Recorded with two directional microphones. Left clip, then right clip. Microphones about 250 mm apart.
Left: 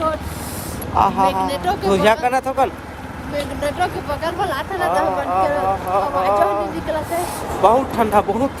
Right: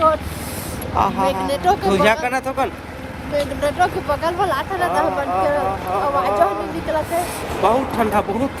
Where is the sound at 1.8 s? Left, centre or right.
Centre.